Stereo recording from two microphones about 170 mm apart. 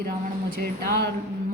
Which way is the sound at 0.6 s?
65° right (ahead or behind).